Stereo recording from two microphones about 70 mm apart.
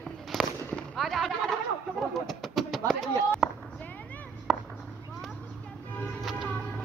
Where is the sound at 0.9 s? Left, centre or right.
Centre.